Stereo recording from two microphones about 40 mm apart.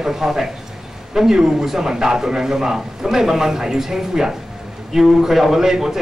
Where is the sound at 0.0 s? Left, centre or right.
Centre.